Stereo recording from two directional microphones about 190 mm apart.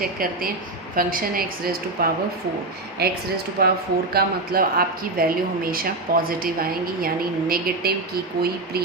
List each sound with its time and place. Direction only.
0.0 s a woman's voice: 50° right (ahead or behind)